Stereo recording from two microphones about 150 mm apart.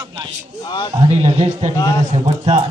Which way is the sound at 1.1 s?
45° right (ahead or behind).